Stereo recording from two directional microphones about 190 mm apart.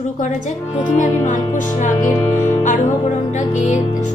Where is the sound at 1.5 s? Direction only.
40° left (ahead or behind).